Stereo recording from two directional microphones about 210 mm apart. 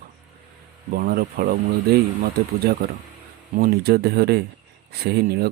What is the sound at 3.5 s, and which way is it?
Speech, 45° right (ahead or behind).